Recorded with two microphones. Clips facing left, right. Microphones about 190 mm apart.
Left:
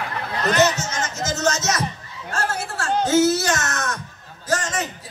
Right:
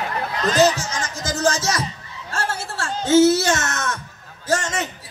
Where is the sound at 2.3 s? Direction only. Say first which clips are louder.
Left 1 dB; 25° right (ahead or behind).